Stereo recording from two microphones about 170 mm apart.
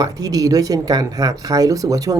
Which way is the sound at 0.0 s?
20° right (ahead or behind).